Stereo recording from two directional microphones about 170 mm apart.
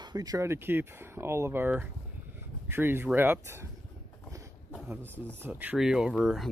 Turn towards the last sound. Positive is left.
turn(degrees=-5)  # may be behind; listen again after turning